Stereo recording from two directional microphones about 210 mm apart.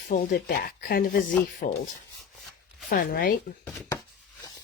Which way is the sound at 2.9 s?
45° left (ahead or behind).